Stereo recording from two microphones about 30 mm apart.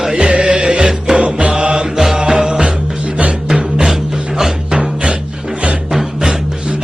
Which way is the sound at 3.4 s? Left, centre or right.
Centre.